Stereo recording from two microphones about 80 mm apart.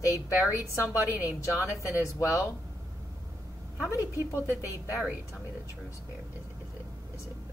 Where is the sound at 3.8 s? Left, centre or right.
Left.